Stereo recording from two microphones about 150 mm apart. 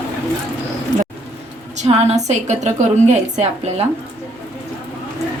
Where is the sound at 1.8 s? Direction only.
45° right (ahead or behind).